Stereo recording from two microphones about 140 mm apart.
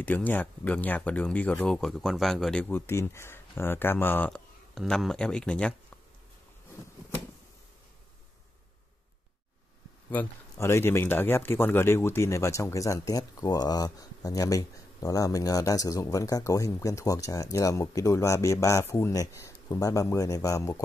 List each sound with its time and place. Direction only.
0.0 s speech: 10° left (ahead or behind)
4.7 s speech: centre (ahead or behind)
10.1 s speech: 20° left (ahead or behind)